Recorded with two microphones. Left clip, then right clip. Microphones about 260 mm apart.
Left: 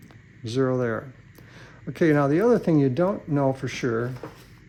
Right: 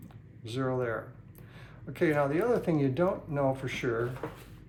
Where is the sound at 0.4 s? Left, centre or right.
Left.